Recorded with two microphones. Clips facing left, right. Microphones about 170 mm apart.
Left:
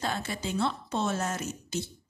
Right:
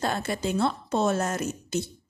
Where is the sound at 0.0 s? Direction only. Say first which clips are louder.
Right 5 dB; 50° right (ahead or behind).